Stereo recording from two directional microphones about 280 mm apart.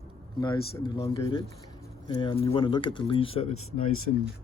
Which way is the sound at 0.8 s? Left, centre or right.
Centre.